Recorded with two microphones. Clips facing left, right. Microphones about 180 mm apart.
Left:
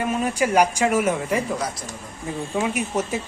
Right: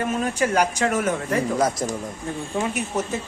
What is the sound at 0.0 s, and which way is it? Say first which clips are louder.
Speech: left 1 dB; 10° left (ahead or behind).